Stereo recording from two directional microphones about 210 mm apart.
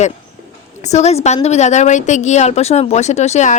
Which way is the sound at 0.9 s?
30° left (ahead or behind).